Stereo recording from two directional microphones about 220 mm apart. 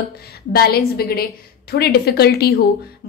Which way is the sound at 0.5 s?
45° left (ahead or behind).